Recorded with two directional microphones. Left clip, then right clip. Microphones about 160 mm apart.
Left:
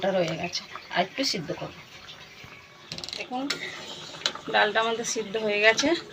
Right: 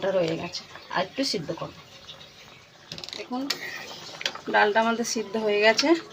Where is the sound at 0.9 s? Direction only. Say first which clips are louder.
Even; 85° right.